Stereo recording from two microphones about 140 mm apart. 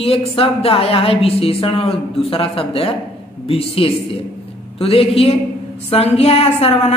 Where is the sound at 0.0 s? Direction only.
45° left (ahead or behind).